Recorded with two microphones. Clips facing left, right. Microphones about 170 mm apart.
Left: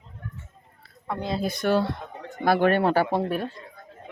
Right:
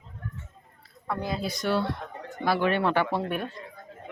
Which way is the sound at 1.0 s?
20° left (ahead or behind).